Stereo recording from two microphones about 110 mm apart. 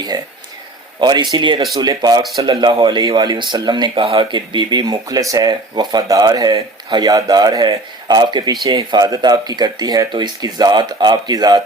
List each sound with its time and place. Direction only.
0.1 s speech: 40° right (ahead or behind)